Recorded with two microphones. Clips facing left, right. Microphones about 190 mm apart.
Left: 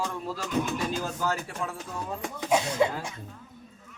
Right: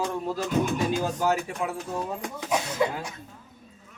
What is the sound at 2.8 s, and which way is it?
Speech, 25° left (ahead or behind).